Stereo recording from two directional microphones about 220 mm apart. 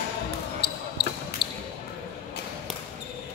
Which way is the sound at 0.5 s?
50° left (ahead or behind).